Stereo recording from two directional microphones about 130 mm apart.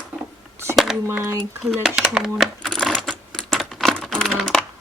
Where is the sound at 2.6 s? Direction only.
5° left (ahead or behind).